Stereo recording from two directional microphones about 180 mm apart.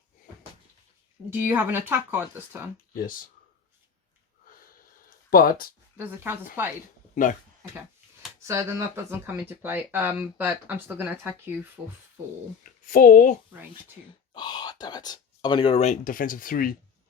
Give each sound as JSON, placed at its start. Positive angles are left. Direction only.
{"t": 1.3, "sound": "speech", "side_deg": -10}
{"t": 5.0, "sound": "a sound", "side_deg": 55}
{"t": 6.0, "sound": "speech", "side_deg": -10}
{"t": 8.4, "sound": "speech", "side_deg": -15}
{"t": 12.6, "sound": "speech", "side_deg": 45}
{"t": 14.3, "sound": "speech", "side_deg": 25}